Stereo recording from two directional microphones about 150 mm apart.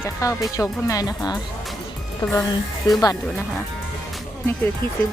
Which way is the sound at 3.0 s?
25° left (ahead or behind).